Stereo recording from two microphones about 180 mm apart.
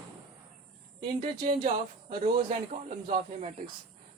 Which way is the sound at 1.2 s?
35° right (ahead or behind).